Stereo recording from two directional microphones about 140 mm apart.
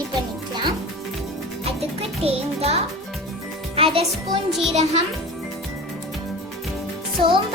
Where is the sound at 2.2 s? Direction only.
45° right (ahead or behind).